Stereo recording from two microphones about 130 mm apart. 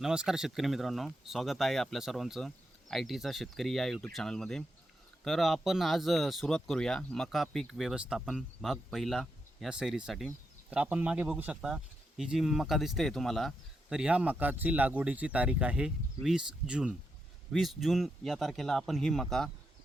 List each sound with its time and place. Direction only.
0.0 s speech: 5° right (ahead or behind)
13.9 s speech: 10° right (ahead or behind)